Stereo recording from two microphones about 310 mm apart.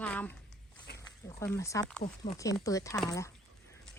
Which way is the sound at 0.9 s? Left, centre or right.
Left.